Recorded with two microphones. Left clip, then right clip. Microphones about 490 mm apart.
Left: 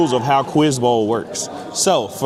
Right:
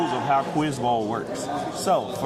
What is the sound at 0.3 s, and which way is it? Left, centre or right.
Speech, left.